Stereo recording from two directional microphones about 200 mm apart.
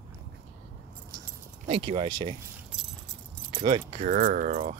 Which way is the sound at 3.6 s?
30° right (ahead or behind).